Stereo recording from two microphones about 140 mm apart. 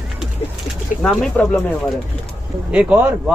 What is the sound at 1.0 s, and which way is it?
Speech, 5° left (ahead or behind).